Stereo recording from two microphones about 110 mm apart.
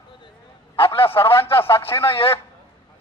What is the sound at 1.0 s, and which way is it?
A man's voice, 20° left (ahead or behind).